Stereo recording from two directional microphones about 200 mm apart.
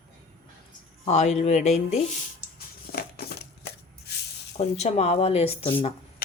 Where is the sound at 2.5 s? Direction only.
50° left (ahead or behind).